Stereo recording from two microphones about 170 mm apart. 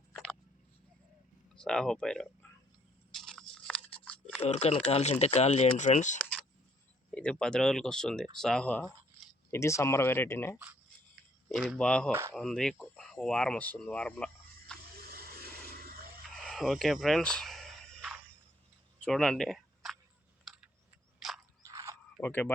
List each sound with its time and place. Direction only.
0.1 s a sound: 5° left (ahead or behind)
1.5 s speech: 5° left (ahead or behind)
3.1 s biting: centre (ahead or behind)
4.4 s speech: 40° left (ahead or behind)
7.1 s speech: 5° left (ahead or behind)
9.5 s speech: 15° left (ahead or behind)
11.4 s speech: 5° right (ahead or behind)
15.1 s a sound: 60° right (ahead or behind)
16.3 s a sound: centre (ahead or behind)
21.2 s mechanisms: centre (ahead or behind)
21.6 s mechanisms: 20° right (ahead or behind)
22.2 s speech: 10° left (ahead or behind)